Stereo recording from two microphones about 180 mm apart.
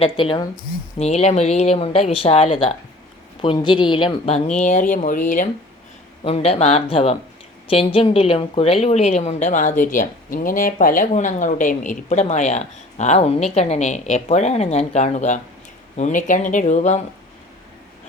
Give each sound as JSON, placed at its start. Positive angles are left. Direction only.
{"t": 0.0, "sound": "a woman's voice", "side_deg": 30}
{"t": 6.2, "sound": "a woman's voice", "side_deg": 35}